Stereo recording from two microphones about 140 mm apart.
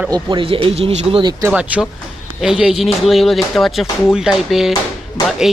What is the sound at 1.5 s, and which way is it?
A man's voice, 10° right (ahead or behind).